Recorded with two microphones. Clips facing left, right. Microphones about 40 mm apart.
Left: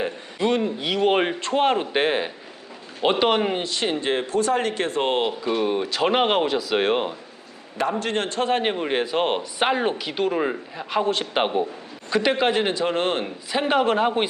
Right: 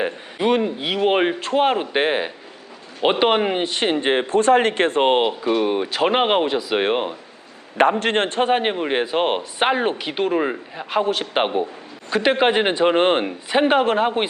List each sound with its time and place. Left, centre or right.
0.0 s speech: right
3.6 s a man's voice: right; by 7.2 s centre
7.8 s a man's voice: right
8.5 s speech: centre
13.8 s speech: centre